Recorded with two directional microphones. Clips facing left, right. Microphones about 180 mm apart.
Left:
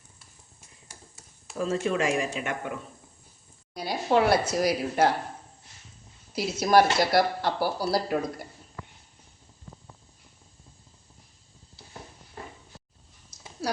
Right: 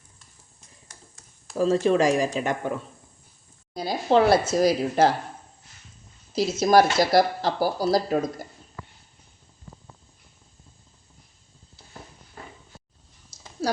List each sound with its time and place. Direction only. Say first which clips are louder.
0.9 s a sound: left 2 dB; 5° left (ahead or behind)
1.5 s speech: right 6 dB; 35° right (ahead or behind)
3.8 s speech: right 3 dB; 25° right (ahead or behind)
6.3 s speech: right 3 dB; 25° right (ahead or behind)